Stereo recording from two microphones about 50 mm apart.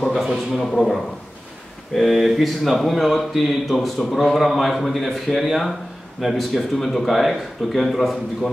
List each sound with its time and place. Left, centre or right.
0.1 s speech: centre
0.6 s speech: centre
2.0 s speech: centre